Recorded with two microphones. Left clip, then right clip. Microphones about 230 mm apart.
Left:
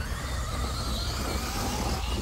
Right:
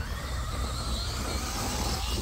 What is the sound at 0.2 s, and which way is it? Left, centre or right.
Music, left.